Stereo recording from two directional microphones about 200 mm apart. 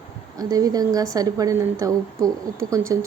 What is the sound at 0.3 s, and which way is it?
A woman's voice, 20° right (ahead or behind).